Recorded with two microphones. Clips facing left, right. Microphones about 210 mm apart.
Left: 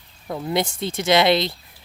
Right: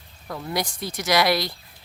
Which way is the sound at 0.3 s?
25° left (ahead or behind).